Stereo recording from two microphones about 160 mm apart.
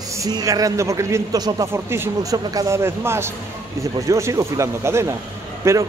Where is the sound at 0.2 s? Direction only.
20° right (ahead or behind).